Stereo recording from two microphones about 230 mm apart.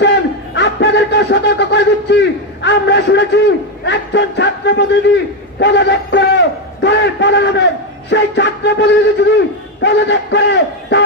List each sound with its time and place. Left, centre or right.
0.0 s a sound: left
8.1 s music: left
9.8 s a man's voice: left